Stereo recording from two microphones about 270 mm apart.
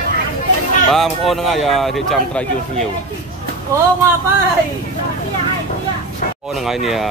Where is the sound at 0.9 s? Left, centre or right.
Centre.